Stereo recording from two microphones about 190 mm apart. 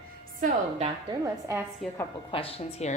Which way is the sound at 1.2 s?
15° right (ahead or behind).